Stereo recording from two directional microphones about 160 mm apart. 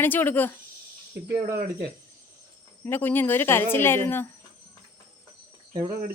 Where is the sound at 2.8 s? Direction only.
15° left (ahead or behind).